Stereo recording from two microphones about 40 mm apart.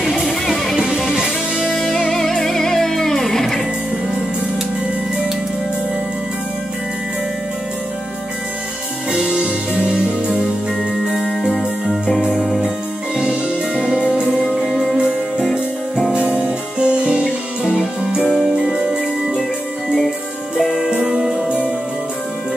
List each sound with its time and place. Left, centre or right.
2.1 s music: centre
12.6 s music: centre
14.6 s music: centre
16.1 s music: right
20.9 s music: centre